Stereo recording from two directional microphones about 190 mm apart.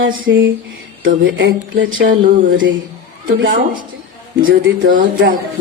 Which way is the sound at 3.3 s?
75° right (ahead or behind).